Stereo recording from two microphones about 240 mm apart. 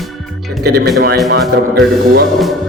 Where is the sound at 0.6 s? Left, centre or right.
Right.